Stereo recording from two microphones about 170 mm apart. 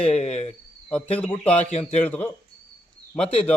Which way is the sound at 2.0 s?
10° left (ahead or behind).